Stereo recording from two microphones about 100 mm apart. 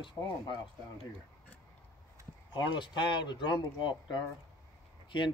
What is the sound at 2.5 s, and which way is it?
Speech, 50° left (ahead or behind).